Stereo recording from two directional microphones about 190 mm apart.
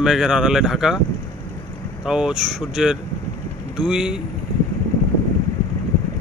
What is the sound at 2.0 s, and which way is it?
Speech, 5° right (ahead or behind).